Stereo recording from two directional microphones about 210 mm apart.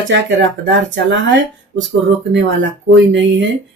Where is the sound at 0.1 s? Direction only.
60° right (ahead or behind).